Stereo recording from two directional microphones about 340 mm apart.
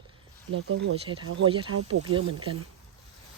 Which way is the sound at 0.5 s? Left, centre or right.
Right.